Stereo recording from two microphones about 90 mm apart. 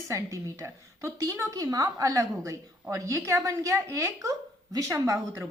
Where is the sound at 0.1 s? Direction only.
35° right (ahead or behind).